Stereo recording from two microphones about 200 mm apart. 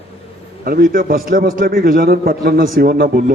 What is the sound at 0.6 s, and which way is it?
A man's voice, 45° right (ahead or behind).